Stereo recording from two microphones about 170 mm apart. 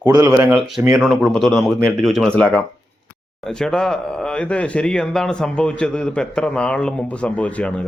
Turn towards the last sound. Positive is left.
turn(degrees=10)  # may be behind; listen again after turning